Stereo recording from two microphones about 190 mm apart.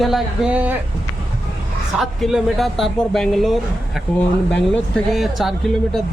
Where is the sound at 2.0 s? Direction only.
Centre (ahead or behind).